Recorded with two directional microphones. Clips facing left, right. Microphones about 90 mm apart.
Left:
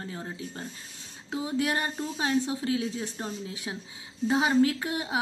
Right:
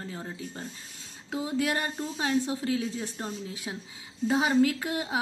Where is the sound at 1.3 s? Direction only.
25° left (ahead or behind).